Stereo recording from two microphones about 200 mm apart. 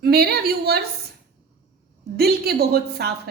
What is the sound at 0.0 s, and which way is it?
Speech, 50° right (ahead or behind).